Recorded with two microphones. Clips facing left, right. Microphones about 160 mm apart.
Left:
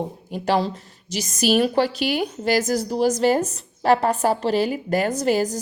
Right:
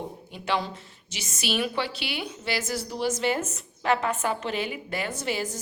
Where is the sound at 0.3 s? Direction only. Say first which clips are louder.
Left 7 dB; 40° left (ahead or behind).